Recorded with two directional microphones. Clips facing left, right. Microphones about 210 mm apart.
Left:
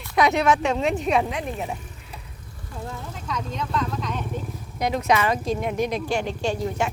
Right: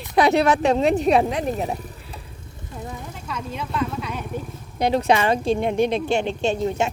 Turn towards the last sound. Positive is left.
turn(degrees=-25)  # may be behind; listen again after turning